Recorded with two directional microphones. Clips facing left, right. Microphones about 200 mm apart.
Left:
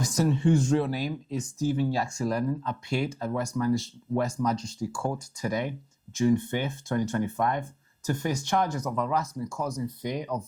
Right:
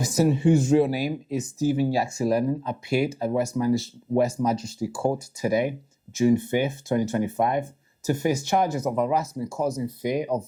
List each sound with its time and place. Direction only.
0.0 s speech: 5° right (ahead or behind)